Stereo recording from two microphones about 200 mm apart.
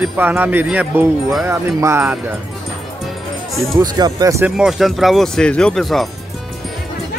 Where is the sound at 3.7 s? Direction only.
20° right (ahead or behind).